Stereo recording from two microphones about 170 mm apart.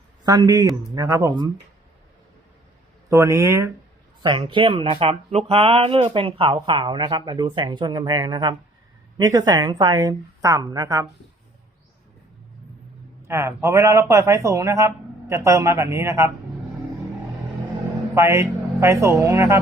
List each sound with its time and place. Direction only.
0.3 s speech: 20° right (ahead or behind)
3.1 s speech: 15° right (ahead or behind)
4.2 s speech: 30° right (ahead or behind)
13.2 s speech: 15° right (ahead or behind)
18.1 s speech: 15° right (ahead or behind)